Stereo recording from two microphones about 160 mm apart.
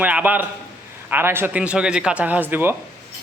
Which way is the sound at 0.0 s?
10° right (ahead or behind).